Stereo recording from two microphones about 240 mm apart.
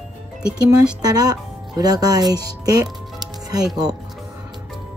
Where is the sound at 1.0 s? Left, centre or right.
Centre.